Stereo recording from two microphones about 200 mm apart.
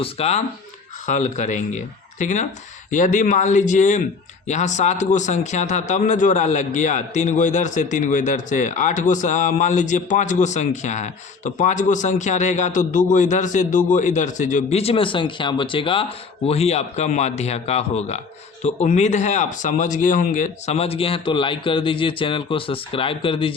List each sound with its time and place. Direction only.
0.0 s speech: 30° left (ahead or behind)